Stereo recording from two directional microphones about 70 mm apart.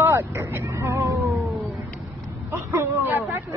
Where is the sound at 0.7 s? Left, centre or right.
Right.